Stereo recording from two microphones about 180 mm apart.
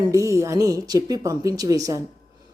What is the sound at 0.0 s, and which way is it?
Speech, 15° right (ahead or behind).